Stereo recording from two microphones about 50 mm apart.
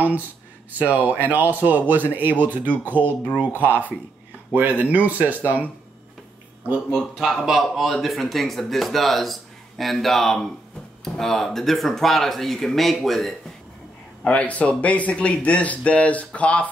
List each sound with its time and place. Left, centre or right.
0.7 s a man's voice: right
7.2 s speech: centre
14.2 s speech: left